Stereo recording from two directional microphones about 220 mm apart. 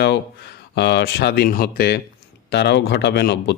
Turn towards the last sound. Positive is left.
turn(degrees=50)  # may be behind; listen again after turning